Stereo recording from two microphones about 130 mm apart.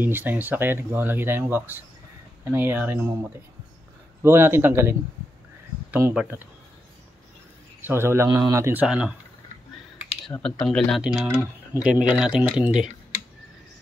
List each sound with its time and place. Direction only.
0.0 s speech: 15° right (ahead or behind)
5.9 s a sound: 20° right (ahead or behind)
7.8 s a man's voice: 20° right (ahead or behind)
8.8 s speech: 5° right (ahead or behind)
10.6 s speech: 5° left (ahead or behind)